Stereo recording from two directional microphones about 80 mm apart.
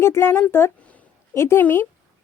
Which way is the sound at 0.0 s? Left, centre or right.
Left.